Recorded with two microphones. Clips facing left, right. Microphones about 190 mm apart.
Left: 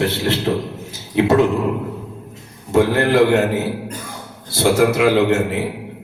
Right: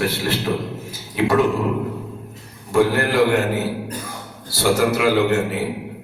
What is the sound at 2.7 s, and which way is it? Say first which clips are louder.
Speech: left 2 dB; 25° left (ahead or behind).